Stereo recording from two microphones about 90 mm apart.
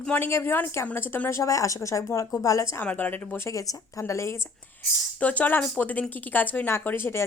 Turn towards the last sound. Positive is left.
turn(degrees=25)  # may be behind; listen again after turning